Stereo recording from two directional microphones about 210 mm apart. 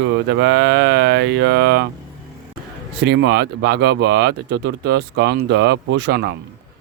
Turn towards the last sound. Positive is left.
turn(degrees=-55)  # may be behind; listen again after turning